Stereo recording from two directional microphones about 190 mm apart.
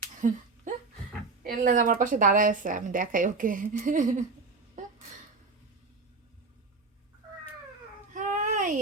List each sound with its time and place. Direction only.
0.2 s a sound: 40° right (ahead or behind)
1.5 s a woman's voice: 45° right (ahead or behind)
8.1 s babbling: 40° right (ahead or behind)